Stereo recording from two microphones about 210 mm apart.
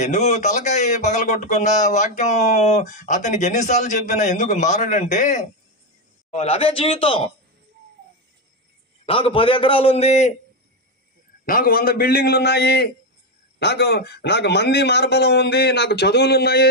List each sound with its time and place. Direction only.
0.0 s a man's voice: 35° left (ahead or behind)
9.0 s a man's voice: 25° left (ahead or behind)
11.4 s a man's voice: 45° left (ahead or behind)